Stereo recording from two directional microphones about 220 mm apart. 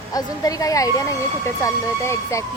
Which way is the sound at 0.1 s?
15° left (ahead or behind).